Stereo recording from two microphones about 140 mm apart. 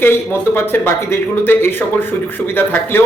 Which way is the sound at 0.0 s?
15° left (ahead or behind).